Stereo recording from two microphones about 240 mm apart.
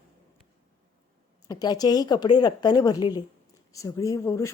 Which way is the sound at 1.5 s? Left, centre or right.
Centre.